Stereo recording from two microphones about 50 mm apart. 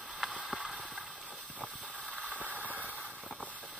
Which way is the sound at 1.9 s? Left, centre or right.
Left.